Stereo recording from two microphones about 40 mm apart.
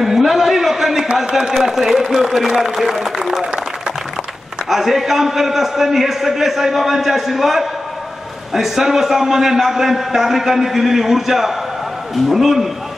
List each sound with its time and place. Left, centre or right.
0.0 s a sound: centre
1.1 s a man's voice: centre
4.6 s a man's voice: centre